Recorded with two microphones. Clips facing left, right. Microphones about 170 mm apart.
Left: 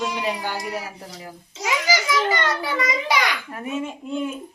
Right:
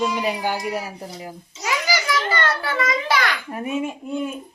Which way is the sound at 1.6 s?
15° left (ahead or behind).